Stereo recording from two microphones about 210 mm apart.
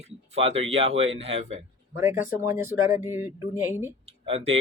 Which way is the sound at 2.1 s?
40° left (ahead or behind).